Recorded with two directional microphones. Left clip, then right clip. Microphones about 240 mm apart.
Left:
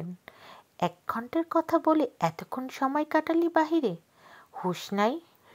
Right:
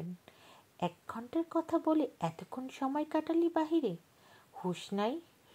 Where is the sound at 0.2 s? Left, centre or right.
Left.